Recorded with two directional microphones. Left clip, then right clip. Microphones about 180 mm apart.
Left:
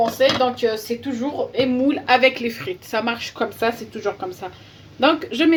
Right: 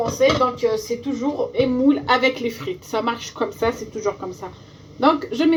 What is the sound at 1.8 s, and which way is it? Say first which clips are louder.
A woman's voice: left 3 dB; 30° left (ahead or behind).